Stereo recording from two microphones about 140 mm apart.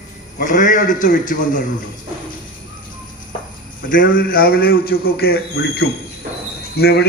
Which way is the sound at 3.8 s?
80° left.